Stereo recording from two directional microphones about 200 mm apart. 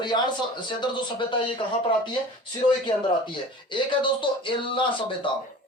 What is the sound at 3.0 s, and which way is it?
A man's voice, 25° left (ahead or behind).